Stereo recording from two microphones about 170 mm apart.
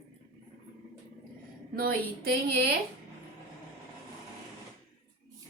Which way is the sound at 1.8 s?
65° right (ahead or behind).